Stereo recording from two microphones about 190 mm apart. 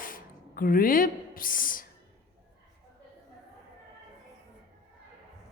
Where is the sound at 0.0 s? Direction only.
50° left (ahead or behind).